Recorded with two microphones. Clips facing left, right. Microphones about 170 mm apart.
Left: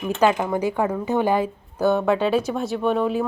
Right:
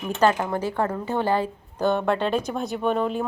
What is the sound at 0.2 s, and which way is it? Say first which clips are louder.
Speech: left 1 dB; 5° left (ahead or behind).